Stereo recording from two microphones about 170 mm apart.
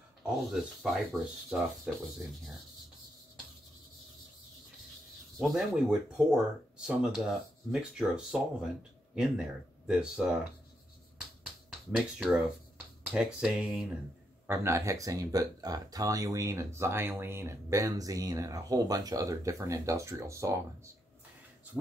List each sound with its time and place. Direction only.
0.2 s speech: centre (ahead or behind)
5.4 s speech: centre (ahead or behind)
11.9 s speech: 5° right (ahead or behind)
14.5 s speech: 15° right (ahead or behind)